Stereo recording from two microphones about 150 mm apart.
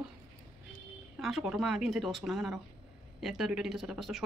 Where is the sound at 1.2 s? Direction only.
5° right (ahead or behind).